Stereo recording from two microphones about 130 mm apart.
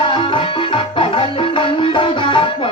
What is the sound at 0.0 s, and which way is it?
Music, 40° left (ahead or behind).